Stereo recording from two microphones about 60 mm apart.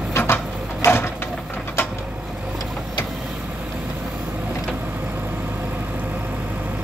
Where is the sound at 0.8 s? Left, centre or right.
Left.